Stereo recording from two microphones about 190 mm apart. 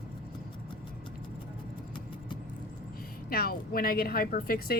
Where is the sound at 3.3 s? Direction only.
50° left (ahead or behind).